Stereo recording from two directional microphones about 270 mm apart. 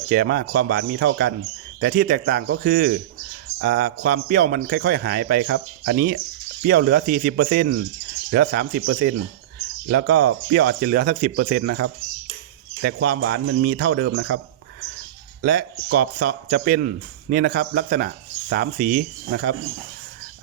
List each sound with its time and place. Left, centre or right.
0.1 s speech: right
15.4 s speech: right